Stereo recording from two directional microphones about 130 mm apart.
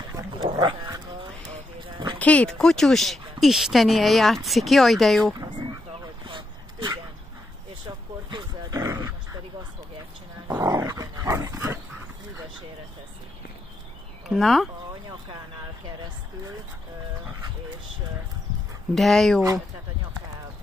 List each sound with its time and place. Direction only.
0.0 s dog: 30° right (ahead or behind)
1.5 s a sound: 40° right (ahead or behind)
2.1 s speech: 10° left (ahead or behind)
5.2 s dog: 30° right (ahead or behind)
6.2 s vehicle: 35° right (ahead or behind)
7.8 s a sound: 35° right (ahead or behind)
8.9 s grunt: 25° right (ahead or behind)
10.5 s dog: 30° right (ahead or behind)
14.3 s speech: centre (ahead or behind)
18.9 s speech: centre (ahead or behind)